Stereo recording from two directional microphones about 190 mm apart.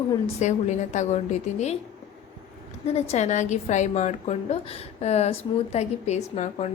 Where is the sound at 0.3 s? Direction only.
40° left (ahead or behind).